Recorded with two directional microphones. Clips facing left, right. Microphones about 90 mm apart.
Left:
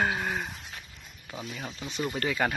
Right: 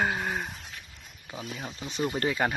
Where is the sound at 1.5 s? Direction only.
15° right (ahead or behind).